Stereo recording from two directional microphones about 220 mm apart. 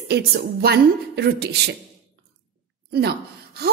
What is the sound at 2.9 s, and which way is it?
Speech, 45° right (ahead or behind).